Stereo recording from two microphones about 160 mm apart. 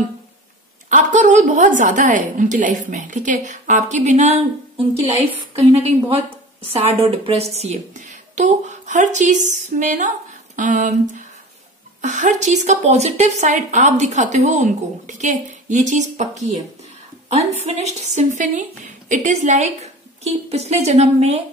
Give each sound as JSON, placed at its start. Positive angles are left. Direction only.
{"t": 0.8, "sound": "a woman's voice", "side_deg": -50}
{"t": 5.8, "sound": "a woman's voice", "side_deg": -40}